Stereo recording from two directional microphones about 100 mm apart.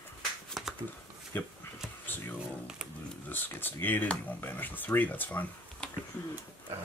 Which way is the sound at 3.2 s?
20° left (ahead or behind).